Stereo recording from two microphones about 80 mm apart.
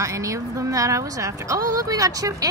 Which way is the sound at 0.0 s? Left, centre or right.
Right.